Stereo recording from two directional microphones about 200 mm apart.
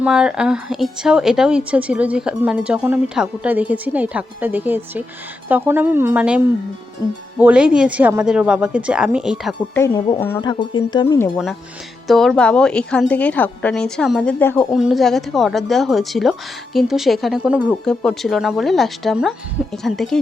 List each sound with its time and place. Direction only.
0.0 s a woman's voice: 5° right (ahead or behind)
9.7 s speech: 15° left (ahead or behind)
12.0 s a woman's voice: centre (ahead or behind)
14.7 s a woman's voice: centre (ahead or behind)